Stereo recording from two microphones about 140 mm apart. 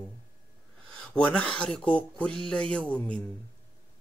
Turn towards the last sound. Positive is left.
turn(degrees=10)  # may be behind; listen again after turning